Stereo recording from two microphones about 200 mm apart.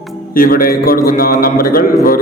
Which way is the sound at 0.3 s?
45° left (ahead or behind).